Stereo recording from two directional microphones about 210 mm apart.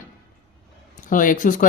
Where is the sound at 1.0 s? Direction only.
40° left (ahead or behind).